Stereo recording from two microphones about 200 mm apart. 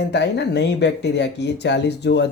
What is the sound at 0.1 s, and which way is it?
Speech, 55° left (ahead or behind).